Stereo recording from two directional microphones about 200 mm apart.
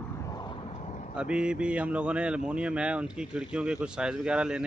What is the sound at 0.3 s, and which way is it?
Vehicle, 20° left (ahead or behind).